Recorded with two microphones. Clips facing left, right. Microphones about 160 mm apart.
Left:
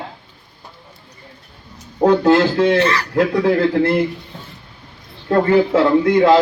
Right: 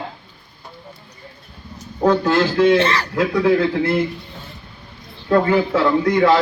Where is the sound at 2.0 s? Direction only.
30° left (ahead or behind).